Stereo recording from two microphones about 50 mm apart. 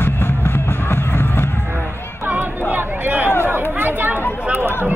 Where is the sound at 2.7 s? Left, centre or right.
Right.